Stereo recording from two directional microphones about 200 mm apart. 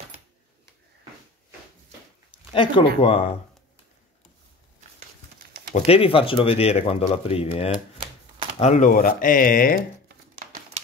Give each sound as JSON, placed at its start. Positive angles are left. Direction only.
{"t": 2.5, "sound": "speech", "side_deg": 25}
{"t": 5.8, "sound": "speech", "side_deg": 30}